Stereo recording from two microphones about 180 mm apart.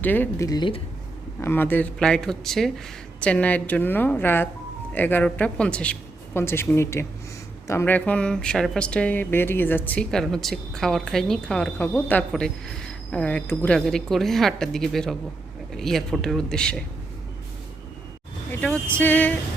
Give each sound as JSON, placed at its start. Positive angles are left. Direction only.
{"t": 0.0, "sound": "speech", "side_deg": 10}
{"t": 1.4, "sound": "speech", "side_deg": 10}
{"t": 18.6, "sound": "speech", "side_deg": 5}